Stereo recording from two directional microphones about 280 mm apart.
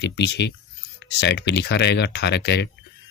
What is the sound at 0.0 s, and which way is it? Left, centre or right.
Speech, left.